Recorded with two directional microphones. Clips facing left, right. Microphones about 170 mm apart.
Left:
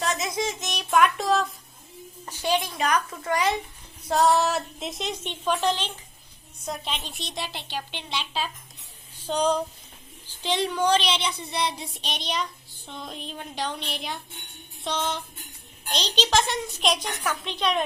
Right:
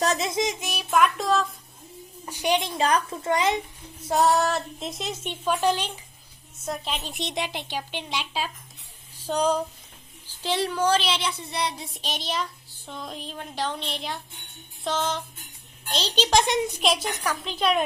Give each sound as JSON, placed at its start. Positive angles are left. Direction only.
{"t": 0.0, "sound": "child singing", "side_deg": -35}
{"t": 0.3, "sound": "child singing", "side_deg": -20}
{"t": 0.6, "sound": "a sound", "side_deg": -5}
{"t": 2.2, "sound": "a child's voice", "side_deg": -15}
{"t": 4.1, "sound": "child singing", "side_deg": 0}
{"t": 7.1, "sound": "speech", "side_deg": -20}
{"t": 10.2, "sound": "child singing", "side_deg": -5}
{"t": 13.7, "sound": "a woman's voice", "side_deg": -30}
{"t": 14.8, "sound": "child singing", "side_deg": 0}
{"t": 15.9, "sound": "speech", "side_deg": -5}
{"t": 16.8, "sound": "child singing", "side_deg": 0}